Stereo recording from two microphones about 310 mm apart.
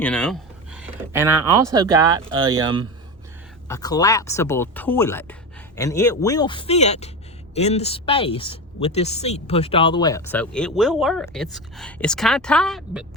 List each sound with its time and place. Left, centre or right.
0.0 s speech: centre
3.7 s a woman's voice: centre